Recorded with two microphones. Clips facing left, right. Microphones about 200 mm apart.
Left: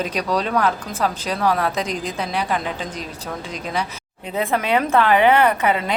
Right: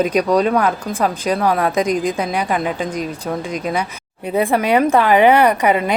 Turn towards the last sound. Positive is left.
turn(degrees=-15)  # may be behind; listen again after turning